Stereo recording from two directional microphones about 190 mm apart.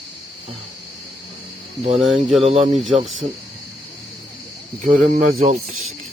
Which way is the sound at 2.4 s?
30° right (ahead or behind).